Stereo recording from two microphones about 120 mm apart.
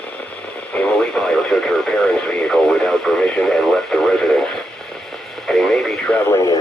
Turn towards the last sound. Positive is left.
turn(degrees=25)  # may be behind; listen again after turning